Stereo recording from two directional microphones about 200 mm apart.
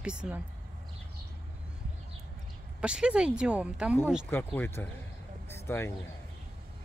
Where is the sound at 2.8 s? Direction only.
5° right (ahead or behind).